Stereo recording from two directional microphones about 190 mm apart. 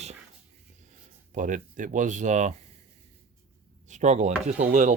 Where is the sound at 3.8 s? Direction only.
40° right (ahead or behind).